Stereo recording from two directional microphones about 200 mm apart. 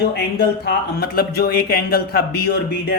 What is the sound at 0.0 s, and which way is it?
Speech, 50° left (ahead or behind).